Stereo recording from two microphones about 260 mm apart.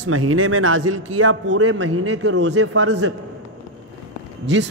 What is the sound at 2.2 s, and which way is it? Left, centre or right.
Speech, right.